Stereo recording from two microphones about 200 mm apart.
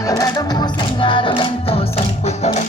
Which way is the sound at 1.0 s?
25° left (ahead or behind).